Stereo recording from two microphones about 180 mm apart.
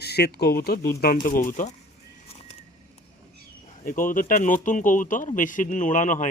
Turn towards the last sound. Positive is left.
turn(degrees=45)  # may be behind; listen again after turning